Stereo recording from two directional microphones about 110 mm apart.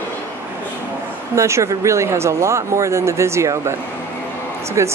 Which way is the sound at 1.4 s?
25° right (ahead or behind).